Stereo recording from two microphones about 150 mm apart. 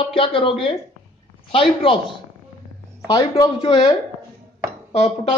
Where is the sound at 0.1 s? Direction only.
35° left (ahead or behind).